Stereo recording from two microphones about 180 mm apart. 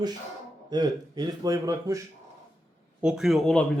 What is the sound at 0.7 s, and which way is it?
Speech, 25° right (ahead or behind).